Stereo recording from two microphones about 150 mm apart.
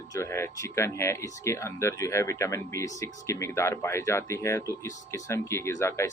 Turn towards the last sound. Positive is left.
turn(degrees=20)  # may be behind; listen again after turning